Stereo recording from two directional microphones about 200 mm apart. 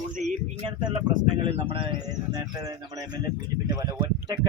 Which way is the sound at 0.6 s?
25° right (ahead or behind).